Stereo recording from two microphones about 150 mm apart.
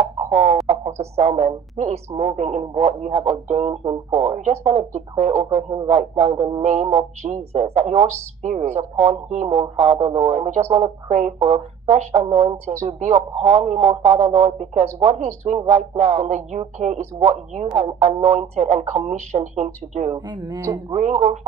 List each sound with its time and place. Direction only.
0.0 s chicken: 45° right (ahead or behind)
0.7 s speech: 45° right (ahead or behind)
11.1 s speech: 55° right (ahead or behind)
20.2 s speech: 25° right (ahead or behind)
20.9 s speech: 50° right (ahead or behind)